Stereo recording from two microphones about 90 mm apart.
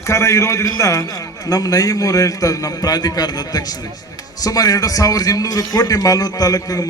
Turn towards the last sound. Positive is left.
turn(degrees=40)  # may be behind; listen again after turning